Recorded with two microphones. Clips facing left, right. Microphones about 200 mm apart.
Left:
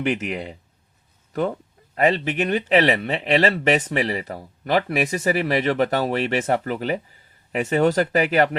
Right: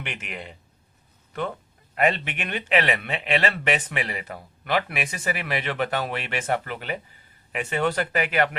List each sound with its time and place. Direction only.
0.0 s speech: 40° left (ahead or behind)